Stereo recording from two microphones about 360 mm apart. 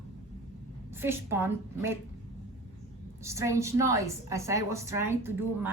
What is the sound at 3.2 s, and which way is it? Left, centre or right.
A woman's voice, centre.